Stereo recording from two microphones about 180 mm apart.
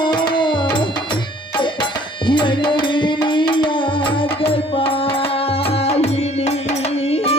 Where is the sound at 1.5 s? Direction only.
25° left (ahead or behind).